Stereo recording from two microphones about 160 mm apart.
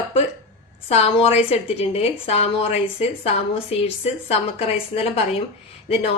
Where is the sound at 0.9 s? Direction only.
40° left (ahead or behind).